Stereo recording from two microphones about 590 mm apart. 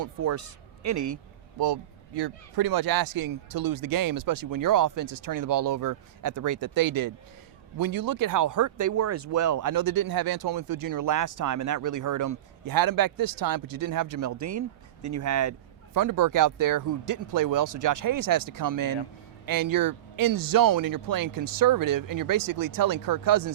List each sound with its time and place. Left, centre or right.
0.0 s a man's voice: right